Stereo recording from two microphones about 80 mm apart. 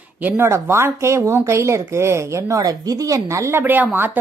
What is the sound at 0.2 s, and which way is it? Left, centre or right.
Speech, right.